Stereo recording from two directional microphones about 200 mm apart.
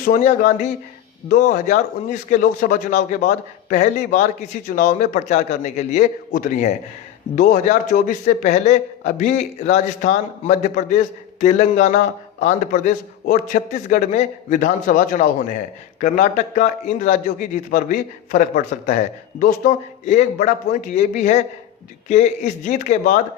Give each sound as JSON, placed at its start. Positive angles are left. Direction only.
{"t": 0.0, "sound": "a man's voice", "side_deg": 45}